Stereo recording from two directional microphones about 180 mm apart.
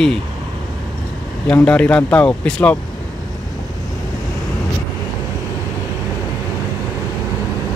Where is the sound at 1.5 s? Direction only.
5° left (ahead or behind).